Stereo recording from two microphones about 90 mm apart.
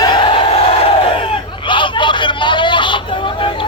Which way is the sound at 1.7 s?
65° left (ahead or behind).